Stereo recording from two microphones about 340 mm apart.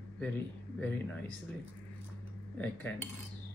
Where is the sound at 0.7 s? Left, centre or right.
Centre.